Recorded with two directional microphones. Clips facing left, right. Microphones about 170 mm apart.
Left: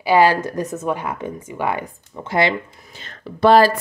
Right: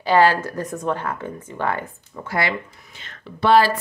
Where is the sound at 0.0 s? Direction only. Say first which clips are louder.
Left 2 dB; 10° left (ahead or behind).